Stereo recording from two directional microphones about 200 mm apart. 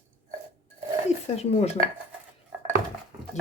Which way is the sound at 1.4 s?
30° left (ahead or behind).